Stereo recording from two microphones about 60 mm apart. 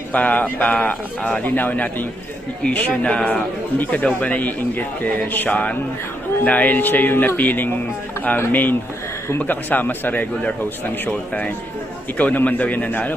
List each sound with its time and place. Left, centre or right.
0.1 s speech: left
3.8 s speech: left
12.1 s speech: left